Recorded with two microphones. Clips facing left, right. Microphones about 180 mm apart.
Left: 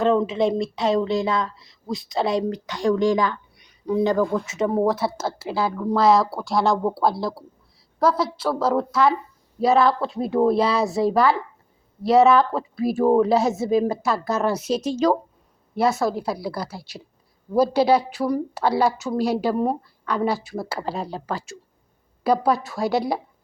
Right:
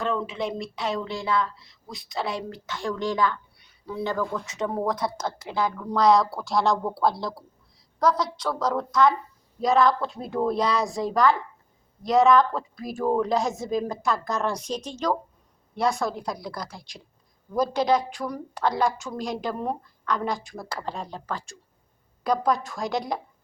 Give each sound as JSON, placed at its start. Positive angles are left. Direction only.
{"t": 0.3, "sound": "a woman's voice", "side_deg": 25}
{"t": 4.2, "sound": "speech", "side_deg": 35}
{"t": 4.4, "sound": "a woman's voice", "side_deg": 5}